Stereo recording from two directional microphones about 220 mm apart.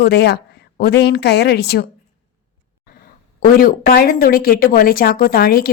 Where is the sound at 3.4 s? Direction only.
40° left (ahead or behind).